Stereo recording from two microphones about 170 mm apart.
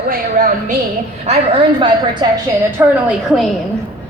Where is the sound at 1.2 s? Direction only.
30° right (ahead or behind).